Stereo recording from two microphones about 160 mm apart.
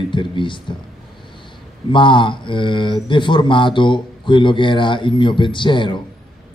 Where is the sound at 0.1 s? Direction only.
30° left (ahead or behind).